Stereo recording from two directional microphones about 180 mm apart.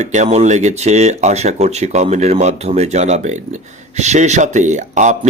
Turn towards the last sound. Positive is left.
turn(degrees=-40)  # may be behind; listen again after turning